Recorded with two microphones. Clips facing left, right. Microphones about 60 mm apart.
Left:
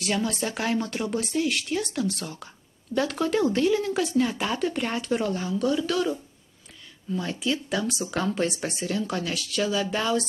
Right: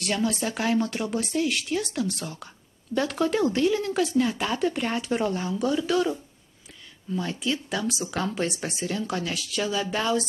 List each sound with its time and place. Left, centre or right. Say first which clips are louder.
0.0 s speech: right 1 dB; centre